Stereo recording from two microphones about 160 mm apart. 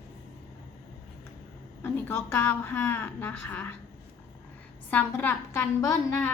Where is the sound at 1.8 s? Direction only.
15° left (ahead or behind).